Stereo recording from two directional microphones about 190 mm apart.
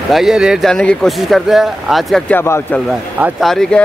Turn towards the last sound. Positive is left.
turn(degrees=5)  # may be behind; listen again after turning